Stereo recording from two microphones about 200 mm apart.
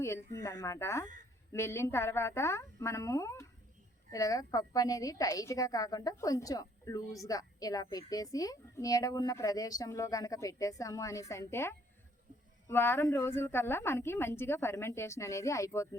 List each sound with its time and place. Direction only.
0.0 s a woman's voice: 15° left (ahead or behind)